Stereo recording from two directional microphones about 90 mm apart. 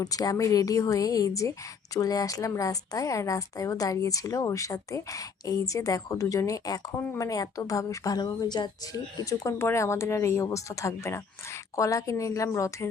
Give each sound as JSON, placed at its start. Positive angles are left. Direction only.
{"t": 0.0, "sound": "a woman's voice", "side_deg": 45}
{"t": 8.9, "sound": "speech", "side_deg": 40}